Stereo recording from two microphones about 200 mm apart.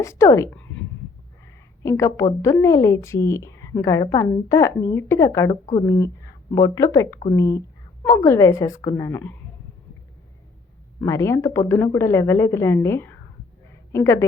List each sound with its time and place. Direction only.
0.0 s a woman's voice: 15° left (ahead or behind)
11.0 s a woman's voice: 15° left (ahead or behind)